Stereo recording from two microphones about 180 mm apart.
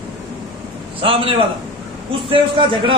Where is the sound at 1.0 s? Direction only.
30° right (ahead or behind).